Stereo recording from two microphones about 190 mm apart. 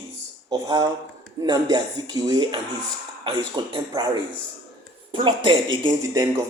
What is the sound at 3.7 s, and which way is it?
Speech, 20° right (ahead or behind).